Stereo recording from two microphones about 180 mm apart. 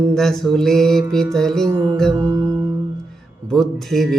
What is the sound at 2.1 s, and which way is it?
Music, 15° right (ahead or behind).